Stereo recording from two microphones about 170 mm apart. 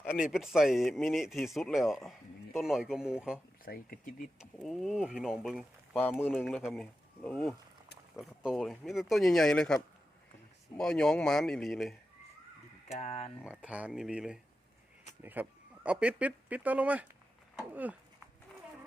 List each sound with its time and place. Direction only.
0.0 s speech: 5° right (ahead or behind)
3.7 s speech: 60° left (ahead or behind)
4.4 s speech: centre (ahead or behind)
6.0 s speech: 10° left (ahead or behind)
6.3 s speech: centre (ahead or behind)
13.0 s speech: 40° left (ahead or behind)
13.4 s speech: 5° right (ahead or behind)